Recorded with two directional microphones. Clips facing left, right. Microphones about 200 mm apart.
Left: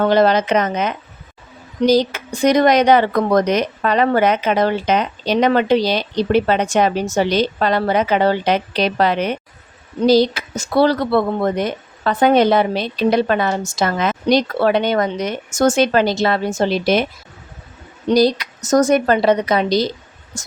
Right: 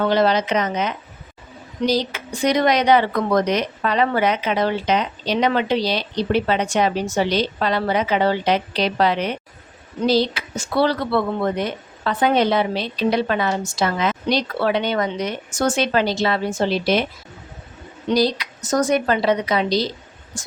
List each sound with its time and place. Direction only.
0.0 s speech: 50° left (ahead or behind)
18.1 s speech: 45° left (ahead or behind)